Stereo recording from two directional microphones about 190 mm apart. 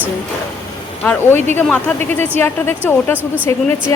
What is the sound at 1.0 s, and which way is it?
Speech, 10° left (ahead or behind).